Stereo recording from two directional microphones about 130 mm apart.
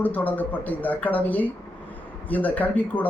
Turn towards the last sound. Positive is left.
turn(degrees=10)  # may be behind; listen again after turning